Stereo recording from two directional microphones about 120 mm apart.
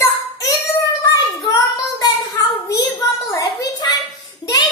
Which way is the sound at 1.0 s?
30° left (ahead or behind).